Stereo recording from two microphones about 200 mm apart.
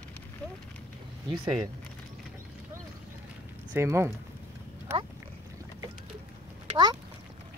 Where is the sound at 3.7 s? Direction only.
15° right (ahead or behind).